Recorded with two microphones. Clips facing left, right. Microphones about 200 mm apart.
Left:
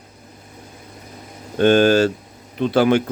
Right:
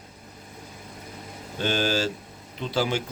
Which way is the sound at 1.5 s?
55° left (ahead or behind).